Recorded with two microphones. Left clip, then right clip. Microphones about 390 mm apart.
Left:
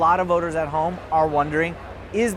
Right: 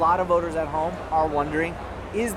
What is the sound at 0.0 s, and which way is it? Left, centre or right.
Speech, left.